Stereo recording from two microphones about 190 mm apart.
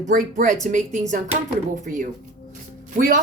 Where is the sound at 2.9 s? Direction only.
40° right (ahead or behind).